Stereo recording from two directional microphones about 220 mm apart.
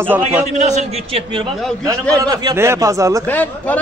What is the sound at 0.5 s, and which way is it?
A man's voice, 30° right (ahead or behind).